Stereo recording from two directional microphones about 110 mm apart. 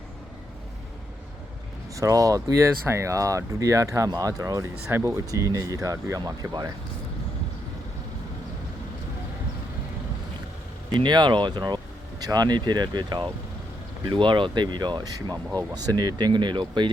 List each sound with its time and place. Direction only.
2.0 s speech: 30° right (ahead or behind)
10.9 s speech: 40° right (ahead or behind)